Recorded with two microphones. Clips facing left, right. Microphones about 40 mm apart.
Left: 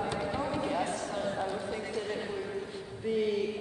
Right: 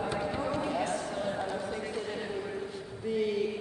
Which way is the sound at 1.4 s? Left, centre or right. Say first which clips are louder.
Even; centre.